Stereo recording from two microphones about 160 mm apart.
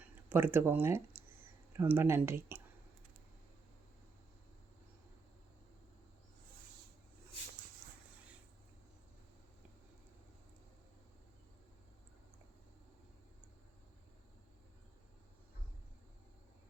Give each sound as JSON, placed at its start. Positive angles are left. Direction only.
{"t": 0.0, "sound": "speech", "side_deg": -15}